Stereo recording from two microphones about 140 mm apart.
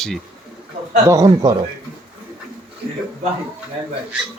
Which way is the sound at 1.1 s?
25° right (ahead or behind).